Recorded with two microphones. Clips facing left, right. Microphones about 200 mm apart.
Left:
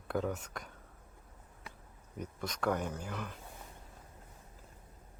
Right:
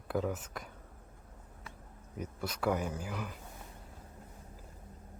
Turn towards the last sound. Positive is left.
turn(degrees=-5)  # may be behind; listen again after turning